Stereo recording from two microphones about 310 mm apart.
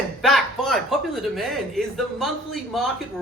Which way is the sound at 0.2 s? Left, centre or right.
Centre.